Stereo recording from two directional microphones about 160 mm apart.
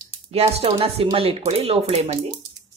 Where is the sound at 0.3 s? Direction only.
40° right (ahead or behind).